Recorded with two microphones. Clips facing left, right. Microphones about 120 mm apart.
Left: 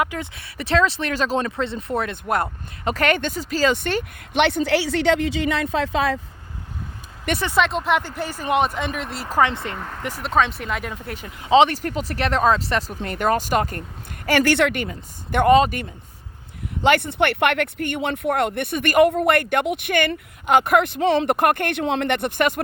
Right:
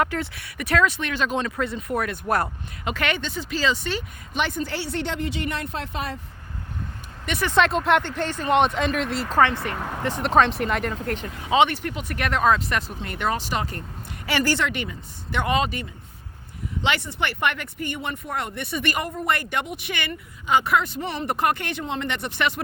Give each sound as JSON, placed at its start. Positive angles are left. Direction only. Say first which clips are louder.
{"t": 0.0, "sound": "speech", "louder": "even", "side_deg": 15}
{"t": 1.4, "sound": "speech", "louder": "left 2 dB", "side_deg": 25}
{"t": 2.8, "sound": "speech", "louder": "left 6 dB", "side_deg": 40}
{"t": 3.7, "sound": "speech", "louder": "left 4 dB", "side_deg": 55}
{"t": 7.5, "sound": "speech", "louder": "right 2 dB", "side_deg": 0}
{"t": 9.4, "sound": "speech", "louder": "left 1 dB", "side_deg": 25}
{"t": 9.7, "sound": "speech", "louder": "right 3 dB", "side_deg": -10}
{"t": 11.4, "sound": "speech", "louder": "left 4 dB", "side_deg": 30}
{"t": 13.0, "sound": "speech", "louder": "left 5 dB", "side_deg": 45}
{"t": 14.4, "sound": "speech", "louder": "left 5 dB", "side_deg": 65}
{"t": 15.3, "sound": "speech", "louder": "left 8 dB", "side_deg": 50}
{"t": 16.8, "sound": "speech", "louder": "left 8 dB", "side_deg": 55}